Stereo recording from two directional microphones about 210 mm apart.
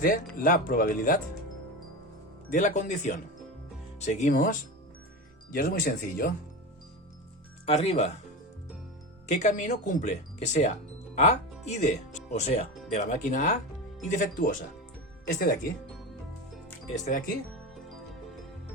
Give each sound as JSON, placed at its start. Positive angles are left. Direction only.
{"t": 0.0, "sound": "speech", "side_deg": 40}
{"t": 2.5, "sound": "speech", "side_deg": 35}
{"t": 7.6, "sound": "speech", "side_deg": 30}
{"t": 9.3, "sound": "speech", "side_deg": 35}
{"t": 16.9, "sound": "speech", "side_deg": 35}